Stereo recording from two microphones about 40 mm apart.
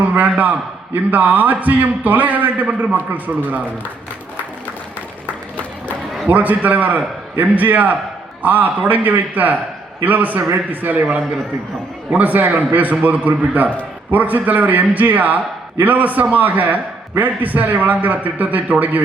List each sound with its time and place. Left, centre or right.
0.0 s a man's voice: right
6.2 s a man's voice: right
12.1 s a man's voice: right